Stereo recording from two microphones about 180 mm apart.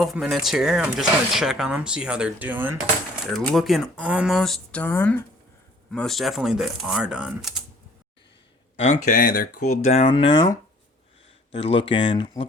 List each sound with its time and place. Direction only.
0.0 s speech: centre (ahead or behind)
3.3 s speech: centre (ahead or behind)
8.8 s speech: 45° left (ahead or behind)
9.8 s speech: 35° left (ahead or behind)